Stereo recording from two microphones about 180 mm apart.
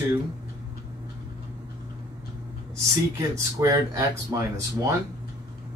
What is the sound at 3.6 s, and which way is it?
Speech, 20° right (ahead or behind).